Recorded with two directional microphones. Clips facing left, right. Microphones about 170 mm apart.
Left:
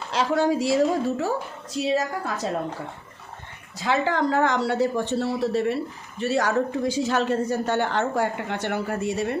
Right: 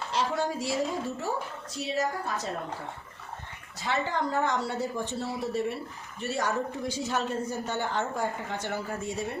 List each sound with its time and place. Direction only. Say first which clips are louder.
0.1 s a woman's voice: left 8 dB; 90° left
3.8 s speech: left 7 dB; 90° left